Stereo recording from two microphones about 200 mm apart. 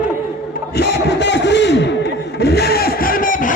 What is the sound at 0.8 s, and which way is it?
Crowd, 60° left (ahead or behind).